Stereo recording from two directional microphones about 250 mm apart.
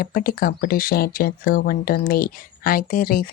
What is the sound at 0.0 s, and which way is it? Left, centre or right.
Speech, left.